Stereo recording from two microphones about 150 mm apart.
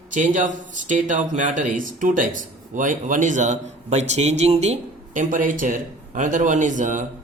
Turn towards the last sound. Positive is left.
turn(degrees=-60)  # may be behind; listen again after turning